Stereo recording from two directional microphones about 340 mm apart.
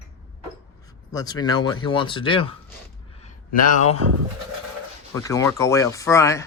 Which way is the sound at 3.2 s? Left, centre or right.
Centre.